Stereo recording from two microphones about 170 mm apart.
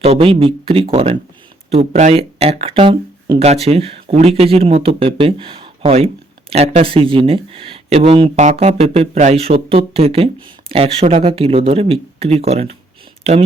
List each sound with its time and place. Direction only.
0.0 s speech: 35° right (ahead or behind)
1.9 s speech: 45° right (ahead or behind)